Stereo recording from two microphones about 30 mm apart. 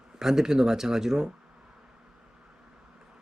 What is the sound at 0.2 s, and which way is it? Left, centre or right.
Speech, centre.